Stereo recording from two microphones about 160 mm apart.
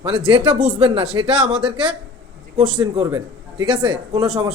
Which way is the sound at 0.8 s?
35° right (ahead or behind).